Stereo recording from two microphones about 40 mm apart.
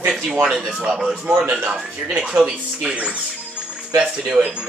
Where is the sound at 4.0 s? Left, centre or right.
Right.